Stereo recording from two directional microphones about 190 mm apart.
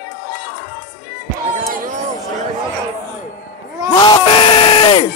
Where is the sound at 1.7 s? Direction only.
45° right (ahead or behind).